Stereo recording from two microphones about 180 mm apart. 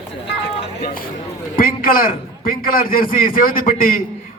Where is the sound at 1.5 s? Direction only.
50° left (ahead or behind).